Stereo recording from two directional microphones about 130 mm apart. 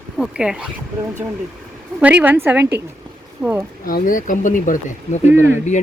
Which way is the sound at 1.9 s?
10° right (ahead or behind).